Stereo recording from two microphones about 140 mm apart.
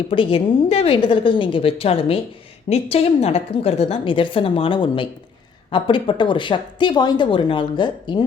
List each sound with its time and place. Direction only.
0.1 s a woman's voice: 40° left (ahead or behind)